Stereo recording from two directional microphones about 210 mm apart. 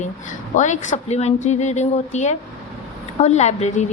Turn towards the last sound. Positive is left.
turn(degrees=30)  # may be behind; listen again after turning